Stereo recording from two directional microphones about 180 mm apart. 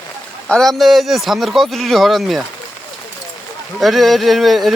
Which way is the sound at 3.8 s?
Centre (ahead or behind).